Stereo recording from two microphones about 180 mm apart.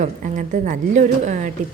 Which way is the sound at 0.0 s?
40° right (ahead or behind).